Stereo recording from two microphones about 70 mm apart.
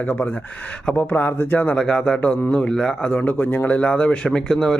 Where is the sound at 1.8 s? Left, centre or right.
Centre.